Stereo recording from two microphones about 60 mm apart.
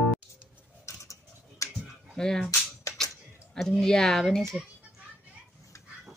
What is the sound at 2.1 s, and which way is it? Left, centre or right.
Cap gun, centre.